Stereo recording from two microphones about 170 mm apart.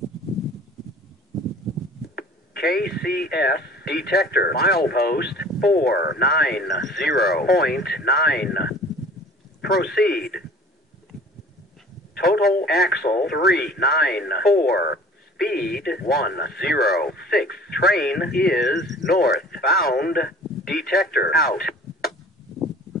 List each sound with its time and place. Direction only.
2.1 s speech: 70° left (ahead or behind)
9.6 s a sound: 70° left (ahead or behind)
9.9 s speech: 65° left (ahead or behind)
12.1 s a man's voice: 65° left (ahead or behind)